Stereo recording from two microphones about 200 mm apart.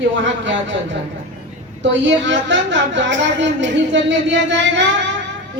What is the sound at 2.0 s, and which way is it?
A woman's voice, 65° right (ahead or behind).